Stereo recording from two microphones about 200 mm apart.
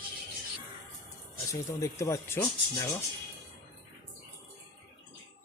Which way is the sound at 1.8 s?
15° left (ahead or behind).